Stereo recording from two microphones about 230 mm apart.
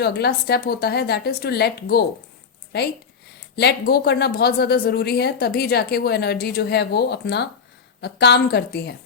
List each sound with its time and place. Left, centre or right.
0.0 s speech: left